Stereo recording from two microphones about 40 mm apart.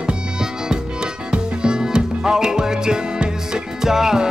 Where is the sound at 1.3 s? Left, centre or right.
Right.